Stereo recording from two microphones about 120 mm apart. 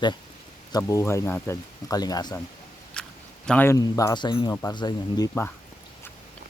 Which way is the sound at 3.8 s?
30° left (ahead or behind).